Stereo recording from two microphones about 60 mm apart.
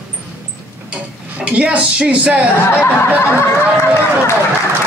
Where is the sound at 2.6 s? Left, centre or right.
Left.